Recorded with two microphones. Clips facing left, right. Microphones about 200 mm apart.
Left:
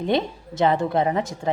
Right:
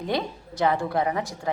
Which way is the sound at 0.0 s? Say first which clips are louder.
Left 5 dB; 25° left (ahead or behind).